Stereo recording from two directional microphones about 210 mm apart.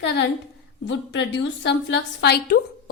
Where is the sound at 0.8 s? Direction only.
60° left (ahead or behind).